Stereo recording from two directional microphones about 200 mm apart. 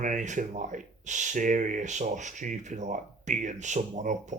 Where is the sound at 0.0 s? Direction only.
40° right (ahead or behind).